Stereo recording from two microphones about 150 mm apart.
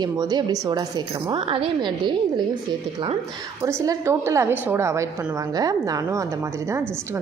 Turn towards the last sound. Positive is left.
turn(degrees=-15)  # may be behind; listen again after turning